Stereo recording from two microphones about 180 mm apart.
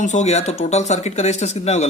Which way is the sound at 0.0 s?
40° left (ahead or behind).